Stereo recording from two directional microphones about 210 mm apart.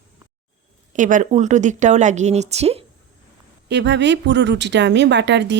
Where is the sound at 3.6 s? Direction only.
55° right (ahead or behind).